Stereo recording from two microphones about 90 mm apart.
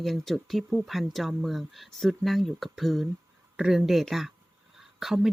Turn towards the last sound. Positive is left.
turn(degrees=-5)  # may be behind; listen again after turning